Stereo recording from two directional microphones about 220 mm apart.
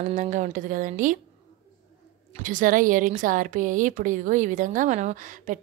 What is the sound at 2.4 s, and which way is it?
Speech, 40° right (ahead or behind).